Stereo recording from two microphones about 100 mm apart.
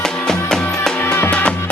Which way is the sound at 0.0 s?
5° left (ahead or behind).